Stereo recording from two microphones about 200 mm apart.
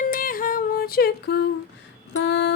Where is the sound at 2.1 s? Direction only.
60° left (ahead or behind).